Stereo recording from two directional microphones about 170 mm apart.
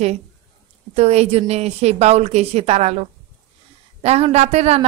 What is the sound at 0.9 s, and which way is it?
A woman's voice, 40° right (ahead or behind).